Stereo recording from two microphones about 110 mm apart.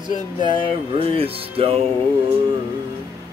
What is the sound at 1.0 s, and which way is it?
Speech, 60° right (ahead or behind).